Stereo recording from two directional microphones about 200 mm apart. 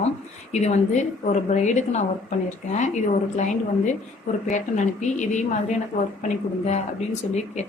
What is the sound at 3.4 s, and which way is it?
A woman's voice, 35° left (ahead or behind).